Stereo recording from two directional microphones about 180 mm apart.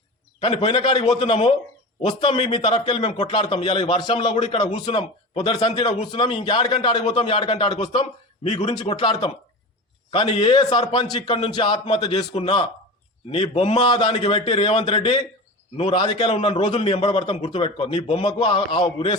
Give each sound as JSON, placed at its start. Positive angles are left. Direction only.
{"t": 0.4, "sound": "a man's voice", "side_deg": 25}